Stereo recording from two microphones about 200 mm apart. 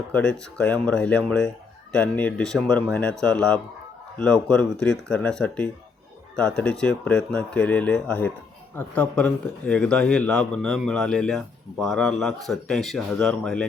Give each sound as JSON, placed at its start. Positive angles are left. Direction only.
{"t": 0.1, "sound": "speech", "side_deg": 5}